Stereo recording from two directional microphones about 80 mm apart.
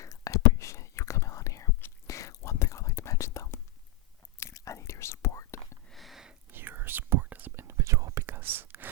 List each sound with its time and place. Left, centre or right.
0.0 s whispering: left
5.9 s a sound: centre
6.5 s whispering: right
8.3 s whispering: right